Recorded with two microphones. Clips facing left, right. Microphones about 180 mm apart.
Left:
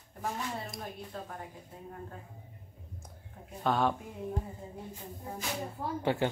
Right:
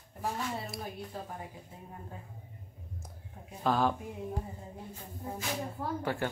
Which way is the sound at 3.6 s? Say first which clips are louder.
Even; centre (ahead or behind).